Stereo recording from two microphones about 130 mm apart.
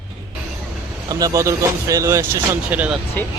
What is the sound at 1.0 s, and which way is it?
Speech, 25° right (ahead or behind).